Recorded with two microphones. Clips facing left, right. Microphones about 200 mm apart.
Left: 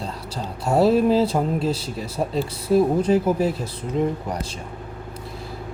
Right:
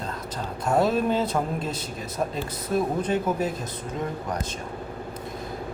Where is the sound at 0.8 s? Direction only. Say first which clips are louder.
Left 7 dB; 30° left (ahead or behind).